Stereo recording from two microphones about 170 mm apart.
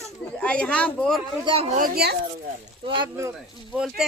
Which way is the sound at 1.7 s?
60° right (ahead or behind).